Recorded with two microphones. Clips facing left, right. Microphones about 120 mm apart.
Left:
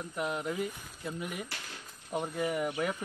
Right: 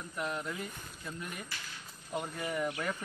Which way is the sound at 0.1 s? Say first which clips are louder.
Left 3 dB; 20° left (ahead or behind).